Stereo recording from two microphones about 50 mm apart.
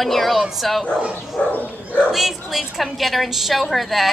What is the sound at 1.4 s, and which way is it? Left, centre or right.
Speech, left.